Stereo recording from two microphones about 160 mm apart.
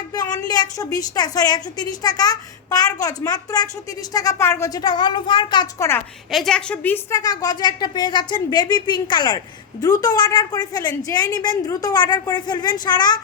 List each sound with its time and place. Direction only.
0.1 s a woman's voice: 25° left (ahead or behind)
5.8 s a woman's voice: 20° left (ahead or behind)
6.3 s a woman's voice: 5° left (ahead or behind); by 13.1 s 25° left (ahead or behind)